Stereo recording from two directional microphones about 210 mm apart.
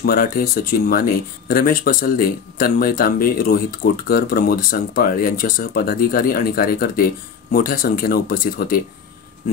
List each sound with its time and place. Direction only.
0.0 s speech: 45° left (ahead or behind)